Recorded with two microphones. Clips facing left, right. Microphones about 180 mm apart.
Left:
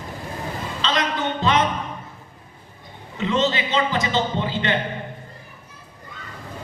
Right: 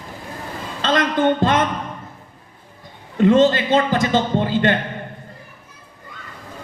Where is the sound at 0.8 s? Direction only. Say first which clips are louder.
Right 7 dB; 50° right (ahead or behind).